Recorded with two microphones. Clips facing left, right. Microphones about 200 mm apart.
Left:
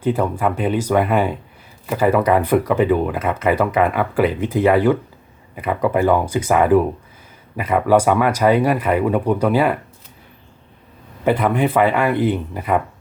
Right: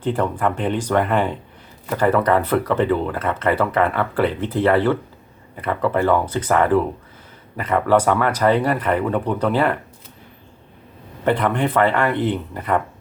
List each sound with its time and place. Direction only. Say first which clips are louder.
0.0 s speech: left 2 dB; 10° left (ahead or behind)
11.2 s speech: left 2 dB; 10° left (ahead or behind)